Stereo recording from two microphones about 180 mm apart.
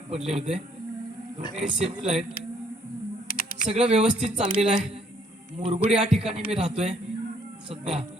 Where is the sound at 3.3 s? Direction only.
55° left (ahead or behind).